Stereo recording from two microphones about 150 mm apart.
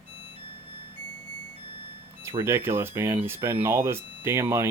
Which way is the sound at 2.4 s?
15° right (ahead or behind).